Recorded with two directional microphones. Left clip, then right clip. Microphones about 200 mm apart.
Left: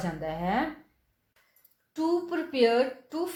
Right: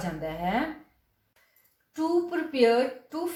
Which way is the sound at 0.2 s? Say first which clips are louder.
Right 1 dB; 35° left (ahead or behind).